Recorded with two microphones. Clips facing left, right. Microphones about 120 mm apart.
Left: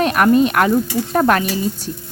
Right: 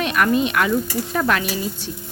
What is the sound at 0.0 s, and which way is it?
Speech, 45° left (ahead or behind).